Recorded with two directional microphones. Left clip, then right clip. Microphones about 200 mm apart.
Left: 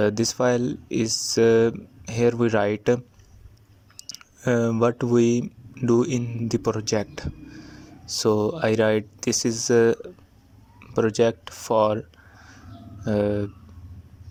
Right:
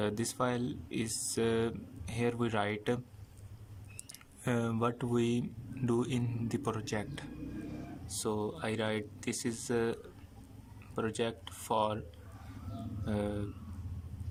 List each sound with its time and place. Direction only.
0.0 s speech: 25° left (ahead or behind)
4.1 s speech: 20° left (ahead or behind)
13.1 s speech: 30° left (ahead or behind)